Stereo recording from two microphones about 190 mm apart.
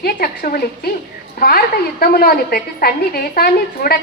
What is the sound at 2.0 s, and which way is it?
A woman's voice, 50° left (ahead or behind).